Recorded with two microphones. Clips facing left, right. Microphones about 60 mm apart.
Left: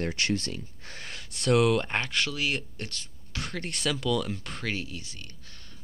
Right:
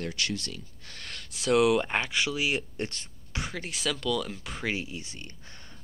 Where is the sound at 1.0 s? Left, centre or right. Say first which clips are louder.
Even; centre.